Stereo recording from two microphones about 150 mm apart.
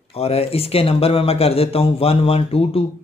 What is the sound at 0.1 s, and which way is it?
Speech, 40° left (ahead or behind).